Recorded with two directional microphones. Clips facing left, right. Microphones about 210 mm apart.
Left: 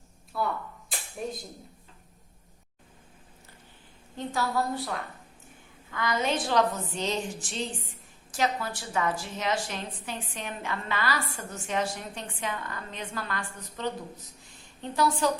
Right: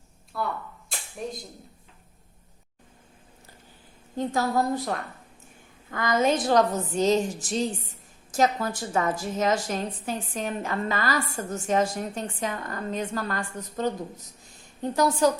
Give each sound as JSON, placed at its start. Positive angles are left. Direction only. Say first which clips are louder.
{"t": 0.3, "sound": "speech", "louder": "even", "side_deg": 0}
{"t": 4.2, "sound": "a woman's voice", "louder": "right 4 dB", "side_deg": -45}
{"t": 5.9, "sound": "a woman's voice", "louder": "right 5 dB", "side_deg": -45}